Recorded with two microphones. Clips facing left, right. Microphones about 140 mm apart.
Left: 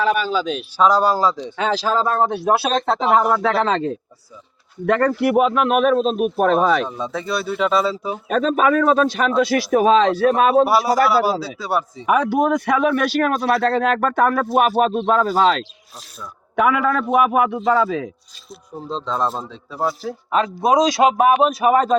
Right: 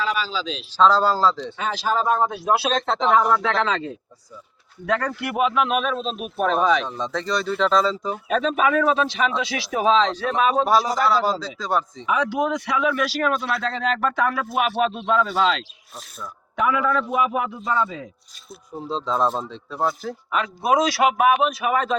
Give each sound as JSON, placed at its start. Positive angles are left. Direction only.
{"t": 0.0, "sound": "speech", "side_deg": 55}
{"t": 0.8, "sound": "speech", "side_deg": 15}
{"t": 1.5, "sound": "speech", "side_deg": 90}
{"t": 2.7, "sound": "speech", "side_deg": 5}
{"t": 3.6, "sound": "speech", "side_deg": 50}
{"t": 6.8, "sound": "speech", "side_deg": 5}
{"t": 8.3, "sound": "speech", "side_deg": 45}
{"t": 10.7, "sound": "speech", "side_deg": 10}
{"t": 12.0, "sound": "speech", "side_deg": 55}
{"t": 16.6, "sound": "a man's voice", "side_deg": 65}
{"t": 18.8, "sound": "speech", "side_deg": 0}
{"t": 20.6, "sound": "speech", "side_deg": 20}
{"t": 21.1, "sound": "speech", "side_deg": 35}